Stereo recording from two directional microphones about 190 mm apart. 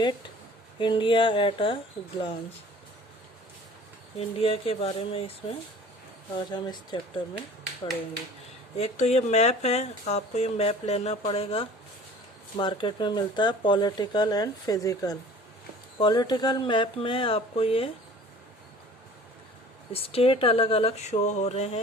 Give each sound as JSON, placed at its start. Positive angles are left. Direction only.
{"t": 0.8, "sound": "speech", "side_deg": 25}
{"t": 4.2, "sound": "speech", "side_deg": 30}
{"t": 8.8, "sound": "speech", "side_deg": 35}
{"t": 19.9, "sound": "speech", "side_deg": 30}